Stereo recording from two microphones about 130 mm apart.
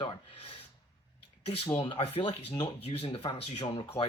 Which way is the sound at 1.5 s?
50° left (ahead or behind).